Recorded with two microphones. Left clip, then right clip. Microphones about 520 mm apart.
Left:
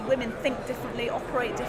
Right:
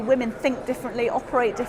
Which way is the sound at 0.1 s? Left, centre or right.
Right.